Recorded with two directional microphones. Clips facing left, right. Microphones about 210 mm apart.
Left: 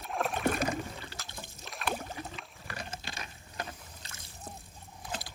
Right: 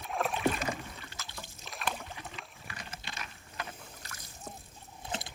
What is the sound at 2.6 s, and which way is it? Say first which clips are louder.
Boat: left 7 dB; 35° left (ahead or behind).